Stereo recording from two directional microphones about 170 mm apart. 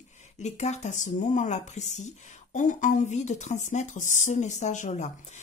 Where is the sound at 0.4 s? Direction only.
40° left (ahead or behind).